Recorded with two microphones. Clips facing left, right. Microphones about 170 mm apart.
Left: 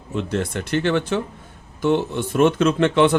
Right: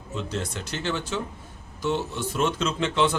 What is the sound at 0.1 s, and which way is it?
Speech, 60° left (ahead or behind).